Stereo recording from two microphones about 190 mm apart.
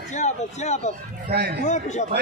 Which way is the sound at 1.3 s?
60° right (ahead or behind).